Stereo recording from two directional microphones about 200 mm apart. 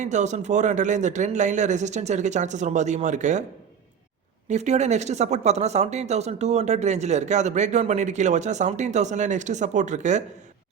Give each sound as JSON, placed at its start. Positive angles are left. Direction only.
{"t": 0.0, "sound": "speech", "side_deg": -35}
{"t": 4.4, "sound": "speech", "side_deg": -35}